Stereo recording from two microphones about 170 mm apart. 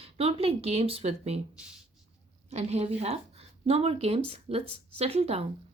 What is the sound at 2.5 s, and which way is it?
Speech, 40° right (ahead or behind).